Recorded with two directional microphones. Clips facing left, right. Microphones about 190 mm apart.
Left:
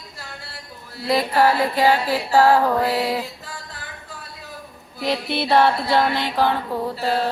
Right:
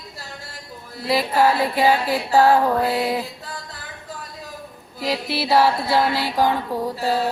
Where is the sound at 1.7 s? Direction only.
15° right (ahead or behind).